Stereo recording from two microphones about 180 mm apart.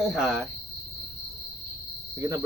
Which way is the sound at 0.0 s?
Centre (ahead or behind).